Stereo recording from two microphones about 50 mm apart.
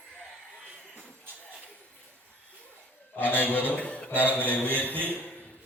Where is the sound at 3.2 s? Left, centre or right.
Left.